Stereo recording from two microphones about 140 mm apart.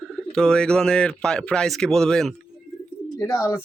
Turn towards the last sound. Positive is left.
turn(degrees=20)  # may be behind; listen again after turning